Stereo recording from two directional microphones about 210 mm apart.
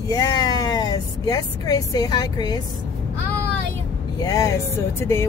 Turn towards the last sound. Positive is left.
turn(degrees=10)  # may be behind; listen again after turning